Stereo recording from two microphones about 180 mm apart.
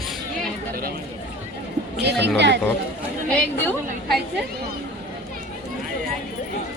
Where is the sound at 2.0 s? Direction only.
70° right (ahead or behind).